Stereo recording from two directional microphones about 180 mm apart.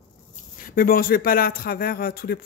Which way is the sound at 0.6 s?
50° left (ahead or behind).